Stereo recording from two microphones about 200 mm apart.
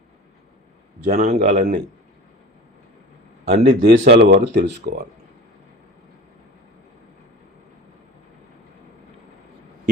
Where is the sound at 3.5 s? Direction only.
50° right (ahead or behind).